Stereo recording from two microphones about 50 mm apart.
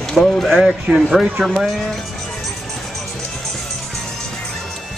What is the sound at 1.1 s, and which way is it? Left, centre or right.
Speech, centre.